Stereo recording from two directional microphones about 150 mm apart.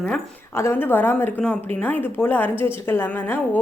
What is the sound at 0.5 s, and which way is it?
A woman's voice, 15° left (ahead or behind).